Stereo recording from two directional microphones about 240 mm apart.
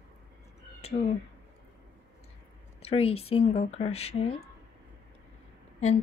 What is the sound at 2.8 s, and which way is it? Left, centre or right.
Speech, left.